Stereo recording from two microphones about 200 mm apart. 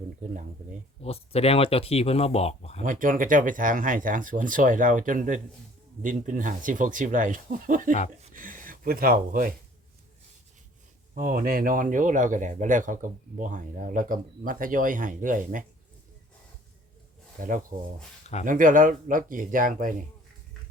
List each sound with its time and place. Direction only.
1.0 s speech: 30° left (ahead or behind)
2.8 s speech: 40° right (ahead or behind)
8.2 s a sound: 45° right (ahead or behind)
11.1 s speech: 45° right (ahead or behind)
17.4 s speech: 40° right (ahead or behind)